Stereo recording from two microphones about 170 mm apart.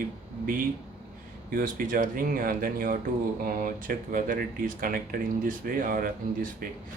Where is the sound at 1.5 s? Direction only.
55° right (ahead or behind).